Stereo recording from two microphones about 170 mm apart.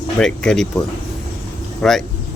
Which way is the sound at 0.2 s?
5° left (ahead or behind).